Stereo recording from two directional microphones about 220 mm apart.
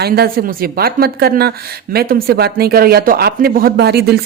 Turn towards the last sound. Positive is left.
turn(degrees=-45)  # may be behind; listen again after turning